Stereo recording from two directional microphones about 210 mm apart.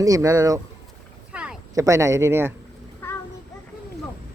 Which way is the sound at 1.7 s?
15° right (ahead or behind).